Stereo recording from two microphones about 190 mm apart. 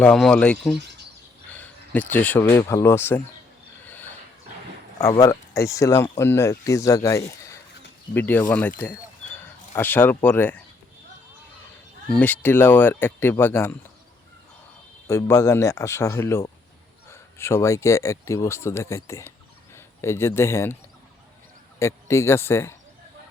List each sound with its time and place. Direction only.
0.0 s speech: 5° left (ahead or behind)
3.8 s a sound: 10° left (ahead or behind)
5.0 s speech: 20° left (ahead or behind)
8.8 s a sound: 10° left (ahead or behind)
12.2 s speech: 10° left (ahead or behind)
15.0 s speech: 15° left (ahead or behind)
21.8 s speech: 15° left (ahead or behind)